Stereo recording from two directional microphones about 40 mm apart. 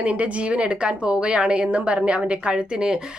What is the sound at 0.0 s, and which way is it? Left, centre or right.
A woman's voice, right.